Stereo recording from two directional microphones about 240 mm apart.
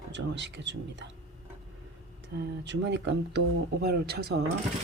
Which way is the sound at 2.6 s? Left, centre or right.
Right.